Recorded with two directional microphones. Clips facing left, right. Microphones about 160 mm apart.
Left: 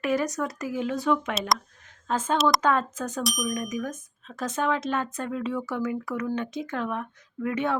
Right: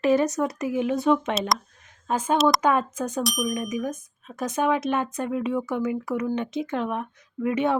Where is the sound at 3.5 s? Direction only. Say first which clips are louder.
Right 2 dB; 20° right (ahead or behind).